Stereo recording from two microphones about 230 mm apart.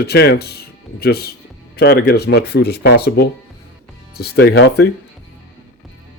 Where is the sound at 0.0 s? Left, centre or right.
Left.